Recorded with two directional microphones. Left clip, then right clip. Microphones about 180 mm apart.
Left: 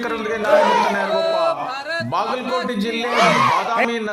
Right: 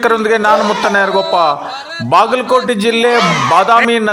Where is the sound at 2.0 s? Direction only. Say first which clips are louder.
Right 15 dB; 45° right (ahead or behind).